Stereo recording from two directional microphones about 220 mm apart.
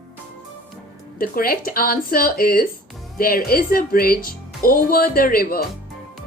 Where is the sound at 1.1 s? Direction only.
40° left (ahead or behind).